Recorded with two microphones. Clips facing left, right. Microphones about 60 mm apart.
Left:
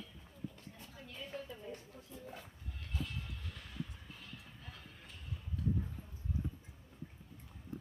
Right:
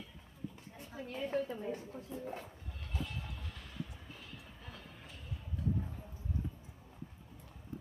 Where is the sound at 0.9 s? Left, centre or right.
Right.